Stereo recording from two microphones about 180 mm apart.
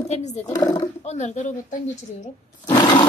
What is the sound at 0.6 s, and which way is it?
Speech, 20° left (ahead or behind).